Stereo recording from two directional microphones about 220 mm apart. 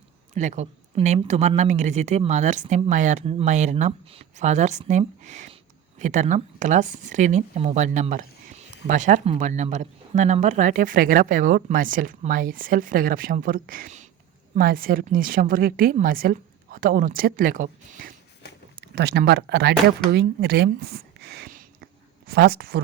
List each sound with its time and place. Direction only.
0.3 s a woman's voice: 30° right (ahead or behind)